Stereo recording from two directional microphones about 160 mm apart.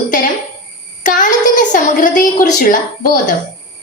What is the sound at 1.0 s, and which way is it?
A woman's voice, 55° left (ahead or behind).